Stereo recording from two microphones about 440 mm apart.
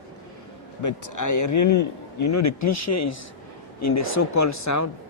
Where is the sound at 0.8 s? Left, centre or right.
Left.